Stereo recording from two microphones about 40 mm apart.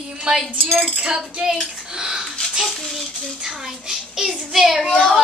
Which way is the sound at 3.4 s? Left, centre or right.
Centre.